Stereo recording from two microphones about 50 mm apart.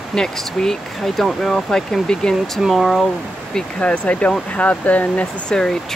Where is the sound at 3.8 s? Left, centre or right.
Left.